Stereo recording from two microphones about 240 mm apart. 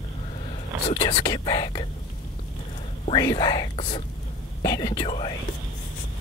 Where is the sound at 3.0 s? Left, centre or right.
Centre.